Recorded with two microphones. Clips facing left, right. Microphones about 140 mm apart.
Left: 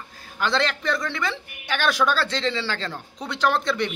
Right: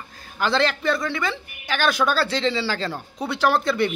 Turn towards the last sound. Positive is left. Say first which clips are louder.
# right 3 dB
turn(degrees=-5)  # may be behind; listen again after turning